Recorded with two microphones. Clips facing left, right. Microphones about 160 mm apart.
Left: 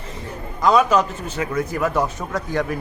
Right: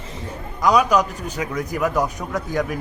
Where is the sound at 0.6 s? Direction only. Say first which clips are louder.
Left 1 dB; 10° right (ahead or behind).